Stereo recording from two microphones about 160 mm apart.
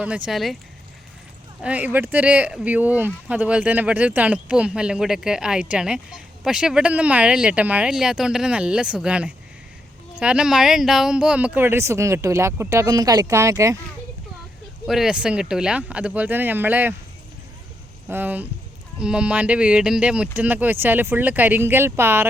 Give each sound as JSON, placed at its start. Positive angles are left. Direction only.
{"t": 0.0, "sound": "speech", "side_deg": -5}
{"t": 1.6, "sound": "speech", "side_deg": -10}
{"t": 14.8, "sound": "speech", "side_deg": -5}
{"t": 18.1, "sound": "speech", "side_deg": -10}